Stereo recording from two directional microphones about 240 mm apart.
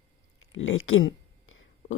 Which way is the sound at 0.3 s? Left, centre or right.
Left.